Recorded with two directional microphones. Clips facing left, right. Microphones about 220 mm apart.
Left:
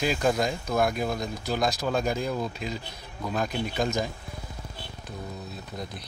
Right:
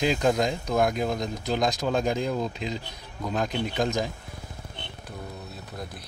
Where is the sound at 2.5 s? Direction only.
20° right (ahead or behind).